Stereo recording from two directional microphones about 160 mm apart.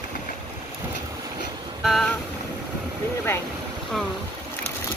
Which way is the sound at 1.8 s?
Centre (ahead or behind).